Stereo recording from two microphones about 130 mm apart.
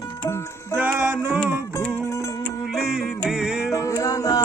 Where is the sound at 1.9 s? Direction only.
20° left (ahead or behind).